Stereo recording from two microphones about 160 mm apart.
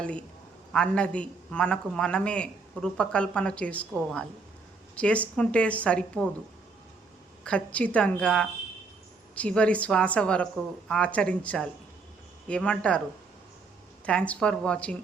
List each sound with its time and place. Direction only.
0.0 s a man's voice: 5° left (ahead or behind)
7.4 s a man's voice: 10° left (ahead or behind)
14.0 s a man's voice: 5° left (ahead or behind)